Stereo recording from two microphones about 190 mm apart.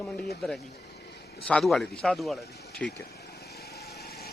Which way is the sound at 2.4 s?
60° left (ahead or behind).